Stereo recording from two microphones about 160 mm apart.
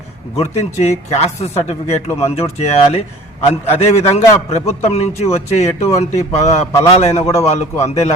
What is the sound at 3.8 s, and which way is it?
Speech, 40° left (ahead or behind).